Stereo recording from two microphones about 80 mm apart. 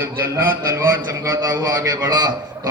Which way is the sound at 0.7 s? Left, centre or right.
Right.